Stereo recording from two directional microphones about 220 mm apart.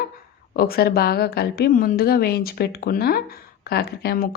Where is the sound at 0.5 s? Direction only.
45° left (ahead or behind).